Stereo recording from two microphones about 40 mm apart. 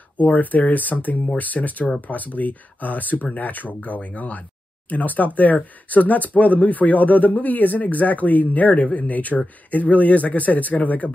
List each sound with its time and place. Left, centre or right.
0.2 s speech: left